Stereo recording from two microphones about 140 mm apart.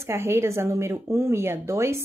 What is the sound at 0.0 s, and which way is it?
Speech, 20° right (ahead or behind).